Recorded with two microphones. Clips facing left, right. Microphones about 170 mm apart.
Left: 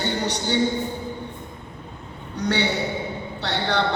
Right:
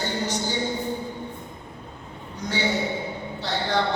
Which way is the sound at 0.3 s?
65° left (ahead or behind).